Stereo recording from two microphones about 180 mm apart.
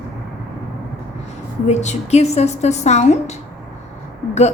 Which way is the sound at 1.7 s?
40° left (ahead or behind).